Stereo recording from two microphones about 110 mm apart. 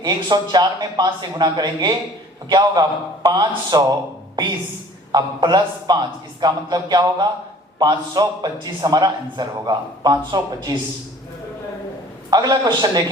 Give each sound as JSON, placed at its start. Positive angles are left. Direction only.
{"t": 0.0, "sound": "a man's voice", "side_deg": -40}
{"t": 5.1, "sound": "a man's voice", "side_deg": -40}
{"t": 12.3, "sound": "a man's voice", "side_deg": -40}